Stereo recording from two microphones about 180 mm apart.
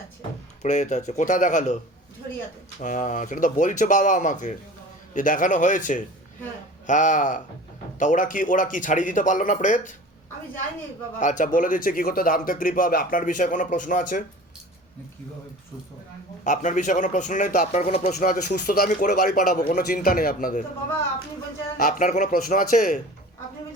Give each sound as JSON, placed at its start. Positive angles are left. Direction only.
{"t": 0.6, "sound": "speech", "side_deg": 40}
{"t": 2.8, "sound": "speech", "side_deg": 45}
{"t": 11.2, "sound": "speech", "side_deg": 45}
{"t": 16.4, "sound": "speech", "side_deg": 45}
{"t": 18.3, "sound": "speech", "side_deg": 55}
{"t": 21.8, "sound": "speech", "side_deg": 50}